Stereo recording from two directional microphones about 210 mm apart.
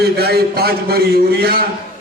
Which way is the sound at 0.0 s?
50° right (ahead or behind).